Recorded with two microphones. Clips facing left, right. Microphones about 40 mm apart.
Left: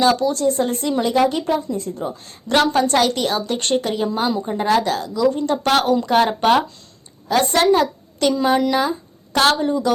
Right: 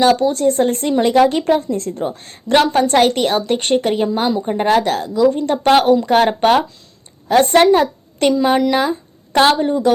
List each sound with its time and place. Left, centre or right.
0.0 s a woman's voice: right
1.0 s a woman's voice: right
2.0 s a woman's voice: right
2.5 s a woman's voice: right
3.6 s speech: right
3.8 s a woman's voice: right